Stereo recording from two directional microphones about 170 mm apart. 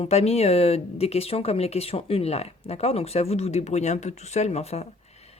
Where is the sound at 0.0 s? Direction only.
35° left (ahead or behind).